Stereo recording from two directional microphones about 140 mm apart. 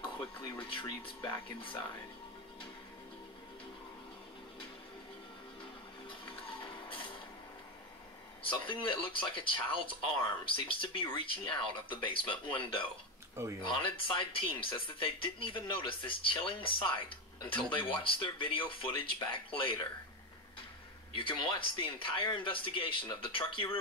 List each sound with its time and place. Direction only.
0.7 s speech: 35° left (ahead or behind)
6.0 s music: 35° left (ahead or behind)
8.4 s speech: 35° left (ahead or behind)
21.1 s speech: 35° left (ahead or behind)